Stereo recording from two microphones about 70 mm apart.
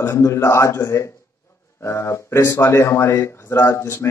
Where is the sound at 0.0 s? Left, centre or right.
Left.